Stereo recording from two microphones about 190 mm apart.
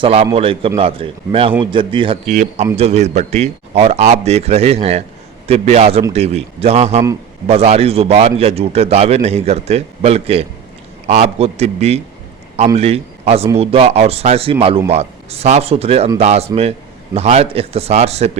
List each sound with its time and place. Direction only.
0.0 s a man's voice: 30° right (ahead or behind)
2.3 s a man's voice: 40° right (ahead or behind)